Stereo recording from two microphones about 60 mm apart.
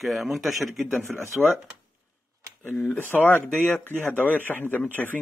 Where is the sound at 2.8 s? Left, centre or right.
Left.